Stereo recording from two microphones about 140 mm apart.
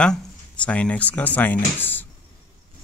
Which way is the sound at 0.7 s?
10° left (ahead or behind).